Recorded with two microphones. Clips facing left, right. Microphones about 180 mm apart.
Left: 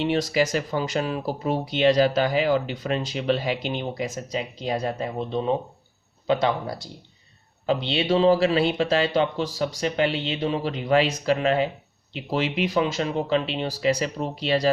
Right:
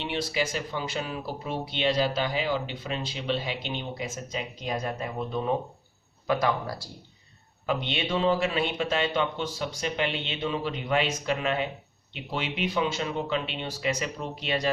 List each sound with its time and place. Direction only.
0.0 s speech: 40° left (ahead or behind); by 6.9 s 20° left (ahead or behind)
7.7 s speech: 30° left (ahead or behind)